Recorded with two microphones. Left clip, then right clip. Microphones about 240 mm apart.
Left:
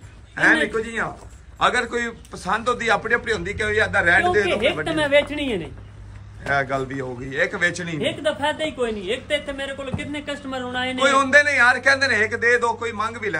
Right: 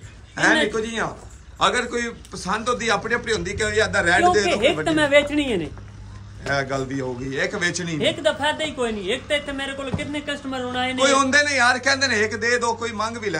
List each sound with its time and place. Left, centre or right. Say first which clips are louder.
0.4 s a man's voice: left 1 dB; centre
4.8 s speech: right 1 dB; right
6.4 s a man's voice: left 2 dB; centre